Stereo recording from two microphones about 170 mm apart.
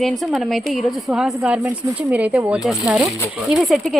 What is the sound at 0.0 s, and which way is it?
Speech, centre (ahead or behind).